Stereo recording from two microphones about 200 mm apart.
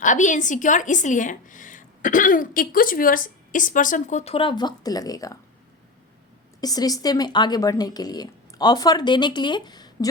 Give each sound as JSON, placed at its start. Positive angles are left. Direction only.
{"t": 0.0, "sound": "a woman's voice", "side_deg": 40}
{"t": 6.6, "sound": "speech", "side_deg": 20}